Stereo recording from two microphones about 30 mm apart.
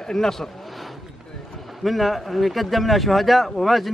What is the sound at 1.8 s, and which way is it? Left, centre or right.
A man's voice, centre.